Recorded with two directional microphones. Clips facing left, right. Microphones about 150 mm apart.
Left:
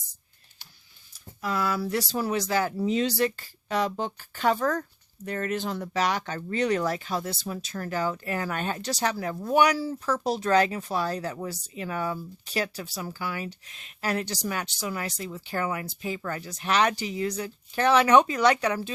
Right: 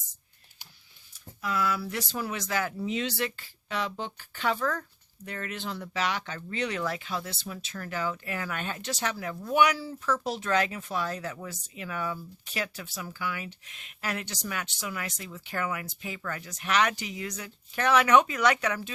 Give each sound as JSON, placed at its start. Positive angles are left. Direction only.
{"t": 1.4, "sound": "speech", "side_deg": 40}